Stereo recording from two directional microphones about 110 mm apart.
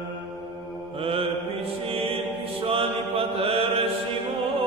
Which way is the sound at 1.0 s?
60° right (ahead or behind).